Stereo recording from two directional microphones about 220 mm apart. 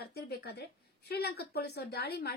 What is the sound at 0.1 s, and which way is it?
Speech, 45° left (ahead or behind).